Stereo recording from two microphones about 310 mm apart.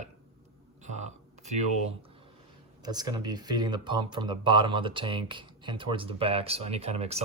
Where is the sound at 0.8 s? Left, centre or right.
Right.